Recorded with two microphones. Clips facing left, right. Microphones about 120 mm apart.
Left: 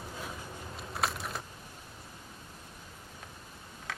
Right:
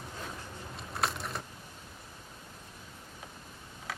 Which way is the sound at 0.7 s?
Centre (ahead or behind).